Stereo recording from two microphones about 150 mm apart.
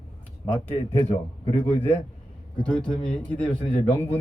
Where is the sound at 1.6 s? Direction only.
10° left (ahead or behind).